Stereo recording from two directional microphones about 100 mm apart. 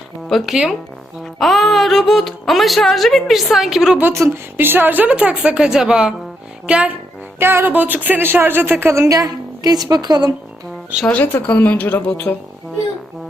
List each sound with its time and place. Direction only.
0.3 s speech: centre (ahead or behind)
4.1 s speech: 25° right (ahead or behind)
7.3 s speech: 20° right (ahead or behind); by 10.3 s 45° right (ahead or behind)
11.0 s speech: 15° left (ahead or behind)